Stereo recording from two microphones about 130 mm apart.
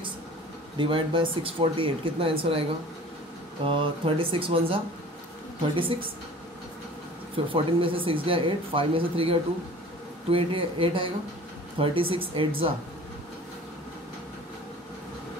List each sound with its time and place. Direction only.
0.7 s speech: 40° right (ahead or behind)
3.6 s speech: 45° right (ahead or behind)
7.3 s speech: 45° right (ahead or behind)